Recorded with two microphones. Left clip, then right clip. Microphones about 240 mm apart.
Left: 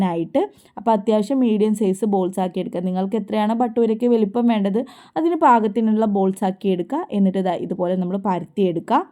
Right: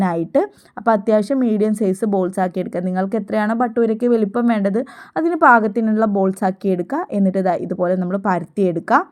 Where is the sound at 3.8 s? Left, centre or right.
Right.